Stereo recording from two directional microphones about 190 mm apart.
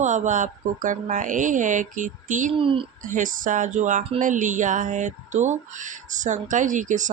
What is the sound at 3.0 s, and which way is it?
Speech, 45° right (ahead or behind).